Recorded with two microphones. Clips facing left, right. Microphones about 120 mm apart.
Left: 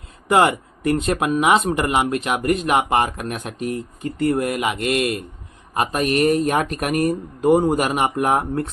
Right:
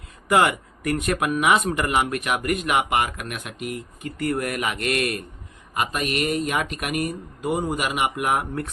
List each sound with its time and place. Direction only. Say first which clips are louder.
0.3 s speech: left 3 dB; 25° left (ahead or behind)
5.7 s speech: left 5 dB; 35° left (ahead or behind)